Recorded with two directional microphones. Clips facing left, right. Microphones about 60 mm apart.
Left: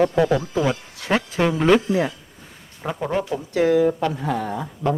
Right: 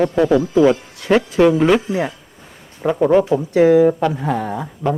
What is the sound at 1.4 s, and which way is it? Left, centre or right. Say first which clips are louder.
Speech: right 3 dB; centre.